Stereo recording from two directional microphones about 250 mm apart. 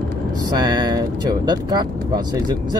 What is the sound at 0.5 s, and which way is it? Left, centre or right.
Speech, centre.